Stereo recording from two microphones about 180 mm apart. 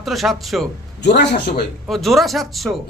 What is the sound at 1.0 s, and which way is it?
Speech, 65° left (ahead or behind).